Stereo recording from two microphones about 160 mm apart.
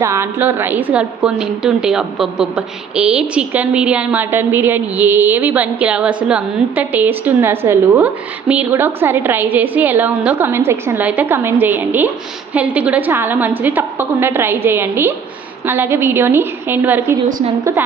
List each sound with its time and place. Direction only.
0.0 s a woman's voice: 15° right (ahead or behind)